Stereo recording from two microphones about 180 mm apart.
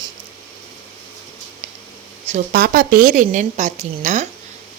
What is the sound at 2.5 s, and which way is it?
A woman's voice, 55° right (ahead or behind).